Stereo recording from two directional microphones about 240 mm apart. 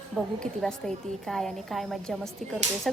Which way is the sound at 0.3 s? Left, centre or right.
Centre.